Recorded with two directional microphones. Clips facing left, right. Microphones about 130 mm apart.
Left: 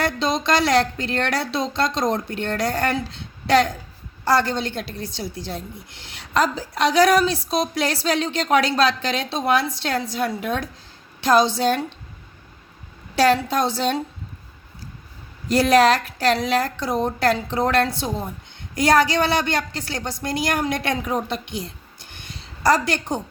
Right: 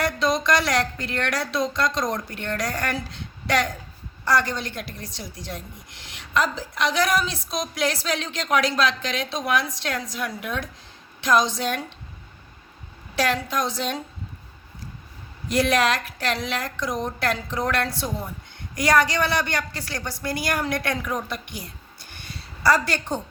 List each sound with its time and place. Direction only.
0.0 s speech: 25° left (ahead or behind)
6.3 s a woman's voice: 40° left (ahead or behind)
13.1 s a woman's voice: 35° left (ahead or behind)
15.5 s a woman's voice: 35° left (ahead or behind)